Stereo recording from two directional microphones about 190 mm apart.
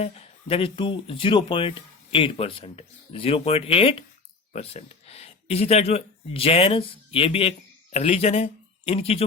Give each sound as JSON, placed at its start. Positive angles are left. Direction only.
{"t": 0.0, "sound": "speech", "side_deg": 30}